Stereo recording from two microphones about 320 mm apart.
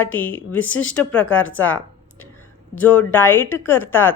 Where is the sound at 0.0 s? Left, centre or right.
Centre.